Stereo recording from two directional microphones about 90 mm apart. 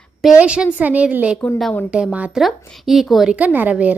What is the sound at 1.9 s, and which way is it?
Speech, 15° right (ahead or behind).